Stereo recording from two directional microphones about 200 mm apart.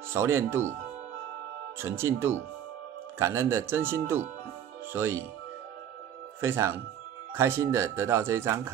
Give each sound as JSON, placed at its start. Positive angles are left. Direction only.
{"t": 0.1, "sound": "speech", "side_deg": -15}
{"t": 1.8, "sound": "speech", "side_deg": -10}
{"t": 6.4, "sound": "speech", "side_deg": -10}